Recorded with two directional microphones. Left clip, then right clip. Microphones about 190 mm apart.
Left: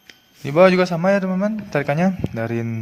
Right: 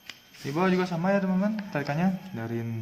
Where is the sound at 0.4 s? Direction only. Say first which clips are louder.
Left 13 dB; 55° left (ahead or behind).